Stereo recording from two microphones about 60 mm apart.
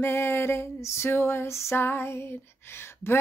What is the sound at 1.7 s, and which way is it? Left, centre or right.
Female singing, left.